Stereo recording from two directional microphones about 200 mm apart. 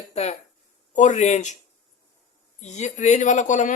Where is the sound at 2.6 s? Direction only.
35° left (ahead or behind).